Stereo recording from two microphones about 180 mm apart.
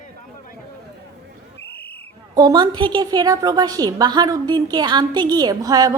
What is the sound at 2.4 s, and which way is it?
A woman's voice, 20° right (ahead or behind).